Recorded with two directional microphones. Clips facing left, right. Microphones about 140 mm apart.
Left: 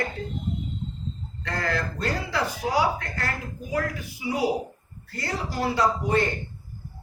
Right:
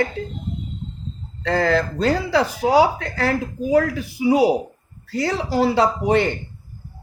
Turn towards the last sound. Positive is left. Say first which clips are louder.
# right 5 dB
turn(degrees=-70)  # may be behind; listen again after turning